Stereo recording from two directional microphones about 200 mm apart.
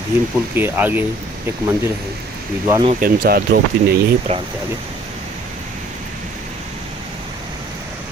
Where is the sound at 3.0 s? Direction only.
50° right (ahead or behind).